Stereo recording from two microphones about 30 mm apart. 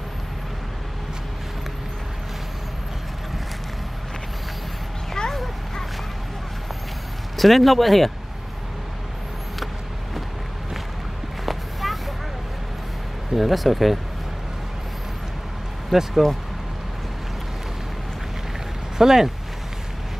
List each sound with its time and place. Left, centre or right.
5.2 s a sound: left
7.3 s speech: centre
11.4 s a sound: centre
13.3 s speech: centre
15.9 s speech: centre
18.9 s speech: centre